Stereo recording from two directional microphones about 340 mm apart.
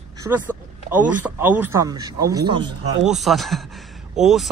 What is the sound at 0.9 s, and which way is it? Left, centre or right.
Speech, centre.